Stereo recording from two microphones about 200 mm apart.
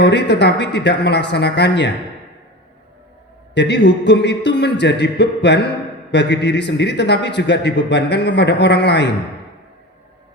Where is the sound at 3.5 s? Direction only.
60° left (ahead or behind).